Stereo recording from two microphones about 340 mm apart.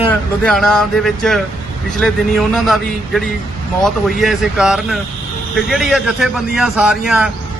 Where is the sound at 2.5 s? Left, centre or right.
Centre.